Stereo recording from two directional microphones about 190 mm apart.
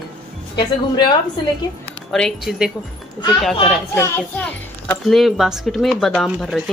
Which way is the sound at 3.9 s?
10° left (ahead or behind).